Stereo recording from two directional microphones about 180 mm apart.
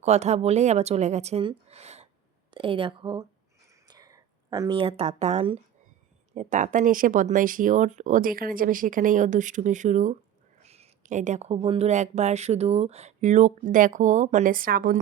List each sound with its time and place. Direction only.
0.0 s speech: 40° right (ahead or behind)